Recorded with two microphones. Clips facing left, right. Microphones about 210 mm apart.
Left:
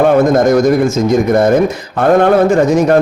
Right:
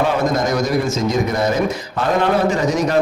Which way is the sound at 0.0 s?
55° left (ahead or behind).